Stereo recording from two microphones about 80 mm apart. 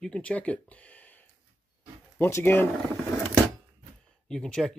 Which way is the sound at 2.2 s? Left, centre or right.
Left.